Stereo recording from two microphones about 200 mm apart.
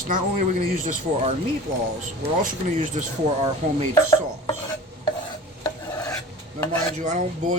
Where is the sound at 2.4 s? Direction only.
40° right (ahead or behind).